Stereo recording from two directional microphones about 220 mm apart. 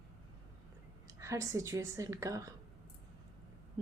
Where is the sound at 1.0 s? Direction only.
15° right (ahead or behind).